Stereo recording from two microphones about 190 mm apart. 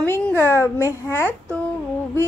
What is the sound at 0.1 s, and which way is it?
A woman's voice, 10° left (ahead or behind).